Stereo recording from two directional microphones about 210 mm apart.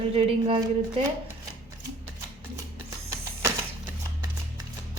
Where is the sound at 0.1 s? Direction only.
25° right (ahead or behind).